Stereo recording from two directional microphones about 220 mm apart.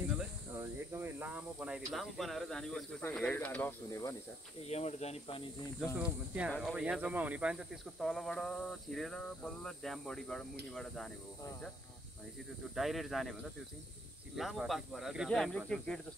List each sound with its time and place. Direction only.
0.6 s speech: 10° right (ahead or behind); by 4.1 s 10° left (ahead or behind)
4.6 s speech: 30° left (ahead or behind)
5.9 s speech: 5° right (ahead or behind)
12.7 s speech: centre (ahead or behind)